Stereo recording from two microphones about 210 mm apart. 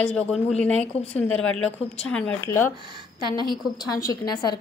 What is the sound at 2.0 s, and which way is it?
Speech, 5° left (ahead or behind).